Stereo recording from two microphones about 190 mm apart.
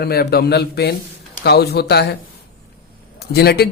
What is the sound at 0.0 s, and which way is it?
A man's voice, 55° left (ahead or behind).